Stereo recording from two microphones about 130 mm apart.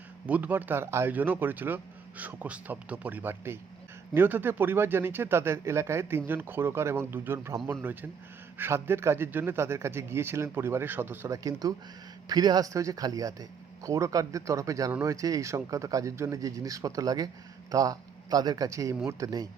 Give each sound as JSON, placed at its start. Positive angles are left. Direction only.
{"t": 0.3, "sound": "a man's voice", "side_deg": -10}